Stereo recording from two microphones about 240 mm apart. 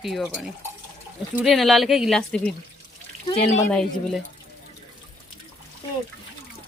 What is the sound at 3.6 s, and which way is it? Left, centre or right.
Speech, centre.